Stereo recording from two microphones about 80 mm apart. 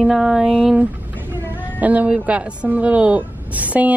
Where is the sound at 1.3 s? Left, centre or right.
Centre.